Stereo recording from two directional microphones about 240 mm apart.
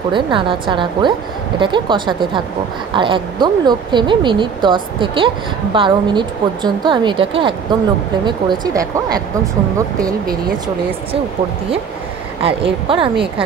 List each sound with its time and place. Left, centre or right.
0.1 s speech: right
12.4 s speech: right